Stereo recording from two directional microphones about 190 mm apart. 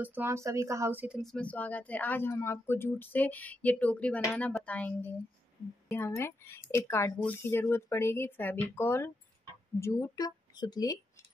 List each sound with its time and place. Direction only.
0.0 s speech: 10° right (ahead or behind); by 11.0 s 20° left (ahead or behind)